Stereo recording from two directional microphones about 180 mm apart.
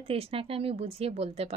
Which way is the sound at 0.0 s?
30° right (ahead or behind).